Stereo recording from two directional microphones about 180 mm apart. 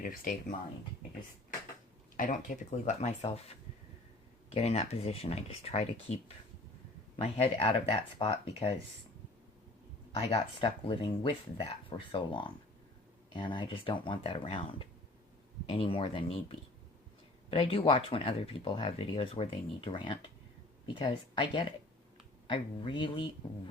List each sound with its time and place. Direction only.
0.0 s speech: 50° left (ahead or behind)
2.1 s speech: 45° left (ahead or behind); by 8.7 s 30° left (ahead or behind)
10.2 s speech: 30° left (ahead or behind)